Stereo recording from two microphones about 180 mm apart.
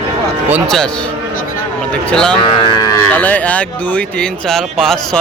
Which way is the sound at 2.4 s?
20° left (ahead or behind).